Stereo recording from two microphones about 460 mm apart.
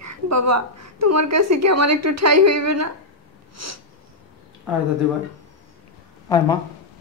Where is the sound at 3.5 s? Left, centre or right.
Right.